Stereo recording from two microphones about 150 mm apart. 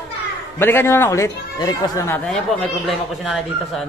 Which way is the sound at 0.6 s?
15° left (ahead or behind).